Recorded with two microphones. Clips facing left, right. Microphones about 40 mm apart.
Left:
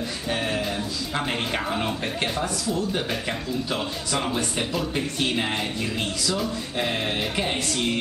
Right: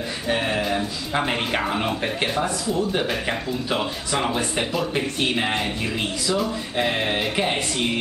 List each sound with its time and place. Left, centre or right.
0.3 s speech: centre